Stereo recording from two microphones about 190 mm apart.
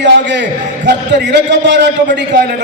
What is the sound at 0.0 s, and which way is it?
A man's voice, 65° right (ahead or behind).